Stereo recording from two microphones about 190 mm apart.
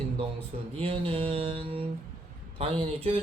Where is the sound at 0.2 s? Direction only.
30° right (ahead or behind).